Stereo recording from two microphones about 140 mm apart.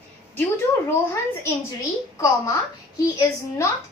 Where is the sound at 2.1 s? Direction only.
25° left (ahead or behind).